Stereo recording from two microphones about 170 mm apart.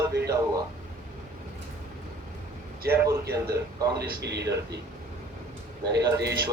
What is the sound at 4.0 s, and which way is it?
Speech, 80° right.